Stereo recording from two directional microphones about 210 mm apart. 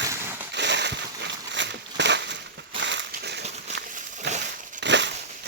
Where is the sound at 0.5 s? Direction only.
55° right (ahead or behind).